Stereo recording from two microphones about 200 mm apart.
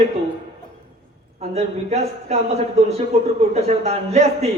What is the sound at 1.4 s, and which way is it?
A man's voice, 30° right (ahead or behind).